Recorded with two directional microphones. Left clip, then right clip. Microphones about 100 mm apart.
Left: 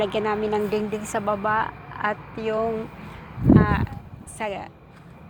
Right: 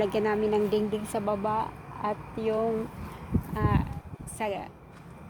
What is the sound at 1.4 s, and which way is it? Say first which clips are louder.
Speech: left 8 dB; 10° right (ahead or behind).